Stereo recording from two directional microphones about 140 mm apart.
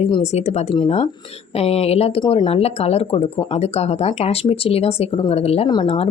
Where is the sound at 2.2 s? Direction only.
35° left (ahead or behind).